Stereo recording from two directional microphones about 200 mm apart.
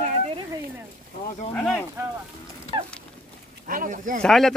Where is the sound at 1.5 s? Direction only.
Centre (ahead or behind).